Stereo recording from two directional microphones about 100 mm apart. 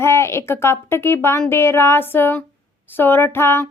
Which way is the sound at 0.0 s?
25° left (ahead or behind).